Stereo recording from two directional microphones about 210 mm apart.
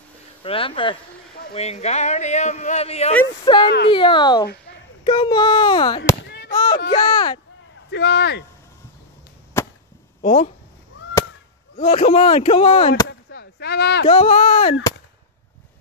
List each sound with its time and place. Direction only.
0.4 s speech: 25° left (ahead or behind)
3.6 s speech: 55° left (ahead or behind)
3.9 s speech: 25° left (ahead or behind)
6.2 s a sound: 50° left (ahead or behind)
6.5 s a sound: 20° left (ahead or behind)
7.9 s speech: 55° left (ahead or behind)
9.6 s chop: 10° left (ahead or behind)
10.2 s speech: 30° left (ahead or behind)
11.7 s speech: 30° left (ahead or behind)
13.3 s a sound: 50° left (ahead or behind)
14.0 s speech: 25° left (ahead or behind)